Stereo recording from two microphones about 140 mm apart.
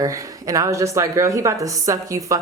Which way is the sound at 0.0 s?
25° right (ahead or behind).